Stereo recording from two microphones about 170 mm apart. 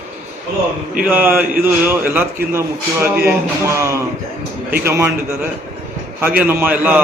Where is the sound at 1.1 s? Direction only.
10° right (ahead or behind).